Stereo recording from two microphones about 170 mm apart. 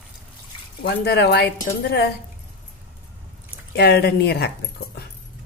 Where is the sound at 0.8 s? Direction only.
70° left (ahead or behind).